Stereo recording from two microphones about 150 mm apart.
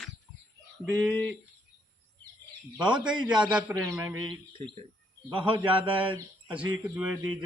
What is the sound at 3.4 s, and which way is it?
Speech, 5° right (ahead or behind).